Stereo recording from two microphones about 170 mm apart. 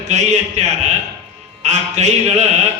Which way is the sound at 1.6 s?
40° right (ahead or behind).